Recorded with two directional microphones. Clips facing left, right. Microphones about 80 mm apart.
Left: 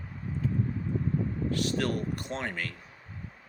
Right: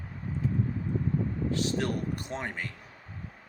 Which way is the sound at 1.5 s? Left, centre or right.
Right.